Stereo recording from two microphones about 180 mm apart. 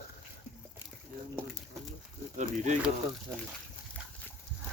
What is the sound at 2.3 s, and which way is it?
Speech, 40° right (ahead or behind).